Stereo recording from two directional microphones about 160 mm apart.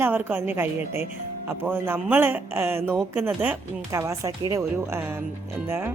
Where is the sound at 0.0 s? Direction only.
10° right (ahead or behind).